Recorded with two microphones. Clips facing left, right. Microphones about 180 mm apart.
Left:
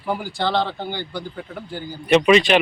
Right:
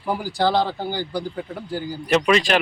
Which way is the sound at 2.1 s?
Centre (ahead or behind).